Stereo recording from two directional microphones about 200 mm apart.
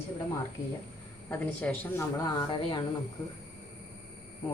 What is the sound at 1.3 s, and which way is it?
A woman's voice, 10° left (ahead or behind).